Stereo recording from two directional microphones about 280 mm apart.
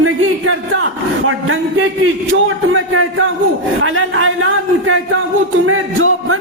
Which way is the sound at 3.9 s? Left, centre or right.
Right.